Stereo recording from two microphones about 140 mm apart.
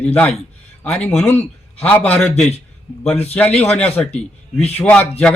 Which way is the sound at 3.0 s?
50° left (ahead or behind).